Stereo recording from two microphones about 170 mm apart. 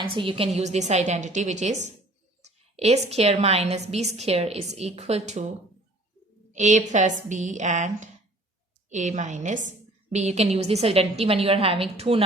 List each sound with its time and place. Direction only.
0.0 s a woman's voice: 30° right (ahead or behind)
6.5 s a woman's voice: 45° right (ahead or behind)